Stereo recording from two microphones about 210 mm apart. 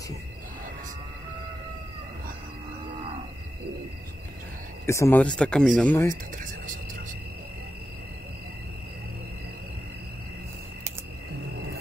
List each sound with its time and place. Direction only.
4.8 s speech: 15° left (ahead or behind)
6.3 s music: 40° right (ahead or behind)